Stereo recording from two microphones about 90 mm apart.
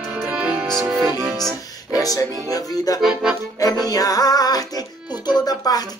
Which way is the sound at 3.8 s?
45° left (ahead or behind).